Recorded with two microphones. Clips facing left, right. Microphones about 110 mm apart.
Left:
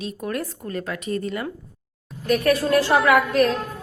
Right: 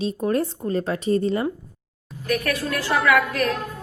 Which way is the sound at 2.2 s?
30° left (ahead or behind).